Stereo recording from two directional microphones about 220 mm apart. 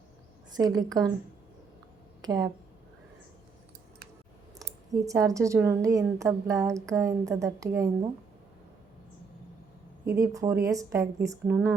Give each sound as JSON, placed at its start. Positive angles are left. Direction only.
{"t": 0.5, "sound": "a woman's voice", "side_deg": -15}
{"t": 2.2, "sound": "a woman's voice", "side_deg": -15}
{"t": 4.9, "sound": "a woman's voice", "side_deg": -15}
{"t": 10.1, "sound": "a woman's voice", "side_deg": -15}